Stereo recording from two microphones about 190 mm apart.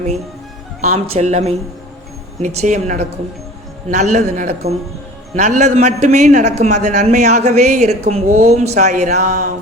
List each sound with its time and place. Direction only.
0.8 s a woman's voice: 35° right (ahead or behind)